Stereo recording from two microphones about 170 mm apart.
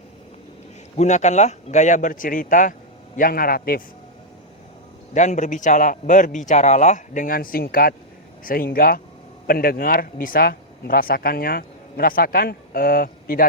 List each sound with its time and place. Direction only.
0.9 s a man's voice: 45° left (ahead or behind); by 3.8 s 60° left (ahead or behind)
5.1 s a man's voice: 45° left (ahead or behind)